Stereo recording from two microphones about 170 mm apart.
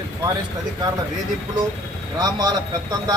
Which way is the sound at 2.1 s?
25° right (ahead or behind).